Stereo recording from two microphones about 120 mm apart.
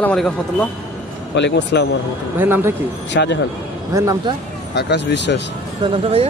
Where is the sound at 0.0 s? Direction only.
10° left (ahead or behind).